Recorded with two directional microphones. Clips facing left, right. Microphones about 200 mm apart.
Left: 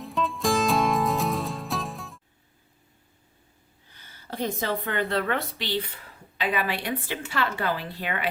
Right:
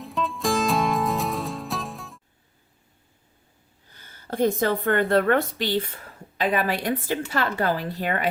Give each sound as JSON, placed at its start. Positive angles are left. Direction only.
{"t": 0.0, "sound": "music", "side_deg": 0}
{"t": 3.9, "sound": "speech", "side_deg": -45}